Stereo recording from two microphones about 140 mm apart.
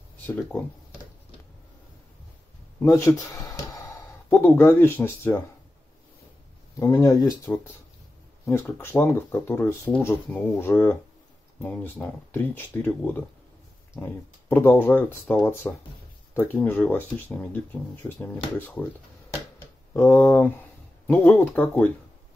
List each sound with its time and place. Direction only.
2.8 s speech: 20° left (ahead or behind)
6.8 s speech: 25° left (ahead or behind); by 17.6 s 5° left (ahead or behind)
18.6 s speech: 10° left (ahead or behind)
19.9 s speech: 15° left (ahead or behind)